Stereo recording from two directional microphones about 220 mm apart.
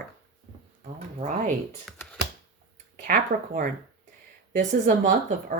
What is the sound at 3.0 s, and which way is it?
Speech, 35° right (ahead or behind).